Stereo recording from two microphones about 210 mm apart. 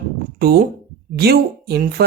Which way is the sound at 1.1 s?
50° right (ahead or behind).